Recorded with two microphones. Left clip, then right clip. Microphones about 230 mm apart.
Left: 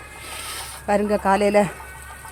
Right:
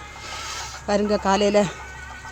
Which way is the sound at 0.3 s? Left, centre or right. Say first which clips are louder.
Right 1 dB; left.